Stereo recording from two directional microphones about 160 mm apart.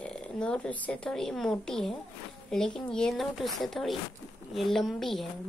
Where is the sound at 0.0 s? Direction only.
5° left (ahead or behind).